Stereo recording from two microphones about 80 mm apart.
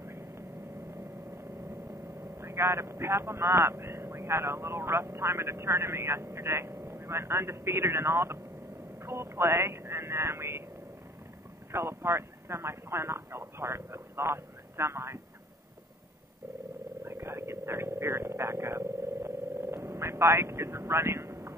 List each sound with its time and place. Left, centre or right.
2.3 s speech: right
11.7 s speech: right
17.0 s hum: right